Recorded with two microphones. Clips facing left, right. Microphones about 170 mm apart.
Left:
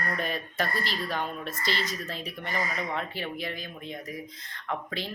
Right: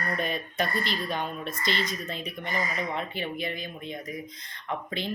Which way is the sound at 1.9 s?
5° left (ahead or behind).